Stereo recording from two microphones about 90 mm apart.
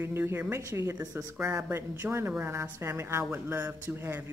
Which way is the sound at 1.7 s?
30° right (ahead or behind).